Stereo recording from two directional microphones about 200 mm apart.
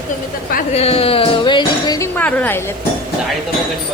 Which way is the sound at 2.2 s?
10° left (ahead or behind).